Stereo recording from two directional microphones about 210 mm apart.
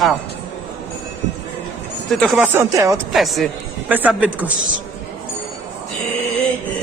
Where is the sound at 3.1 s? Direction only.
Centre (ahead or behind).